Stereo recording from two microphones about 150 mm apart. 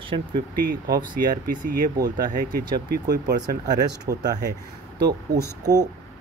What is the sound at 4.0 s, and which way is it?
Speech, 25° right (ahead or behind).